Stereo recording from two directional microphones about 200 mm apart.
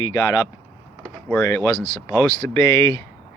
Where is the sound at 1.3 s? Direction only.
15° left (ahead or behind).